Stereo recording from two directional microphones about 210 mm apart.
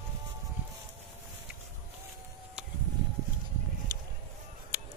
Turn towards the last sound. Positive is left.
turn(degrees=-10)  # may be behind; listen again after turning